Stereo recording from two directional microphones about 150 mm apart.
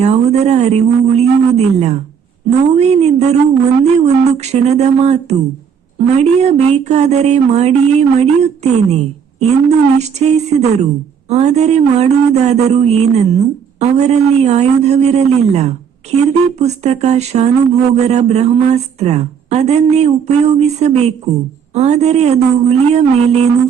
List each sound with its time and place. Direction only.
0.0 s speech: 45° right (ahead or behind)